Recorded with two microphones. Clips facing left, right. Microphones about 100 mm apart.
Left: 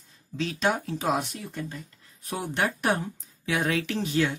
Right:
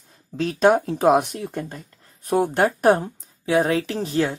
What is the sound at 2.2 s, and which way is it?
Speech, 40° right (ahead or behind).